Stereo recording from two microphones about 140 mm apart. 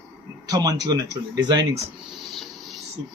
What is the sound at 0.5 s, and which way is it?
Speech, 25° right (ahead or behind).